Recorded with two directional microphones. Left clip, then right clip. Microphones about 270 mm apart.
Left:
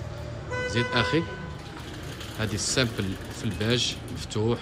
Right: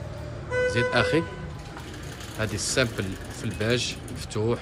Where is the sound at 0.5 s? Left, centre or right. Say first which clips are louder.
Right 6 dB; left.